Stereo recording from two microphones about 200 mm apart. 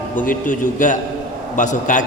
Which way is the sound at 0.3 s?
40° left (ahead or behind).